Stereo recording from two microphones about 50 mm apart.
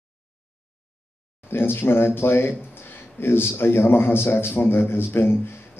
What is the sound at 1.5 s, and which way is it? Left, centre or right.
A man's voice, left.